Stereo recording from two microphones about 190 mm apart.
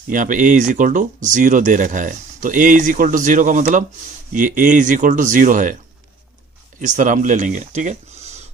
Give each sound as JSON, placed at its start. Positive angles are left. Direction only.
{"t": 0.1, "sound": "speech", "side_deg": -45}
{"t": 6.7, "sound": "speech", "side_deg": -40}